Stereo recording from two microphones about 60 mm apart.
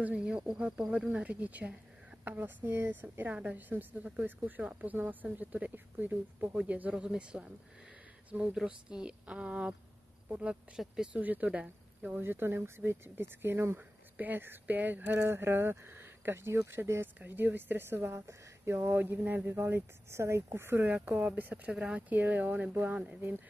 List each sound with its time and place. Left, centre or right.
0.0 s a woman's voice: centre; by 2.9 s right
2.9 s a woman's voice: right
12.2 s speech: right
13.7 s speech: right
17.2 s speech: right
19.6 s speech: right; by 22.0 s centre
22.1 s a woman's voice: right